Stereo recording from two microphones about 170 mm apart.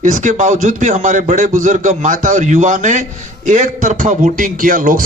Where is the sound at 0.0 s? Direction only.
50° right (ahead or behind).